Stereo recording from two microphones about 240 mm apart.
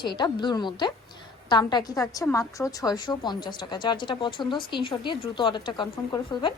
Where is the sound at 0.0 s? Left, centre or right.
Centre.